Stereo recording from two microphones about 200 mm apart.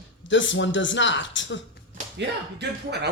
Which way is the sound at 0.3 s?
65° left (ahead or behind).